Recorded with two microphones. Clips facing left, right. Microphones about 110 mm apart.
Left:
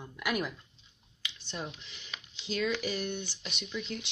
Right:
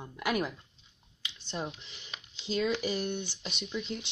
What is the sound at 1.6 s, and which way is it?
Speech, 30° right (ahead or behind).